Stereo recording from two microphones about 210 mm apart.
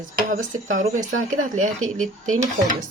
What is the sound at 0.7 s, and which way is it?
Speech, 35° right (ahead or behind).